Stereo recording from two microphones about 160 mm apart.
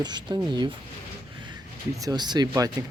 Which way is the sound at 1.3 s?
30° right (ahead or behind).